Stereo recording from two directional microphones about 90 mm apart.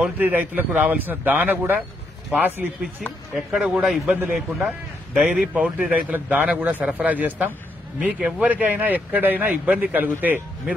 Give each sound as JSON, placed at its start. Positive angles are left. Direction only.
{"t": 0.2, "sound": "speech", "side_deg": -20}